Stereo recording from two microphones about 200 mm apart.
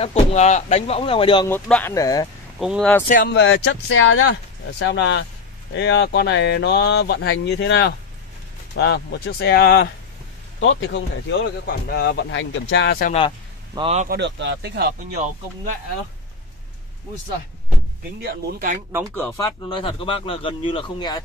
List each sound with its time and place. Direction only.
0.0 s speech: 30° left (ahead or behind)
1.5 s speech: 10° left (ahead or behind)
2.6 s speech: 5° right (ahead or behind)
3.3 s speech: 60° left (ahead or behind); by 4.3 s 90° left
4.7 s speech: 60° left (ahead or behind)
10.6 s speech: 65° left (ahead or behind)
11.6 s speech: 55° left (ahead or behind)
13.7 s a man's voice: 30° right (ahead or behind)
14.0 s speech: 60° right (ahead or behind)
18.2 s speech: 45° right (ahead or behind)
18.9 s speech: 10° right (ahead or behind)
19.1 s speech: 15° left (ahead or behind)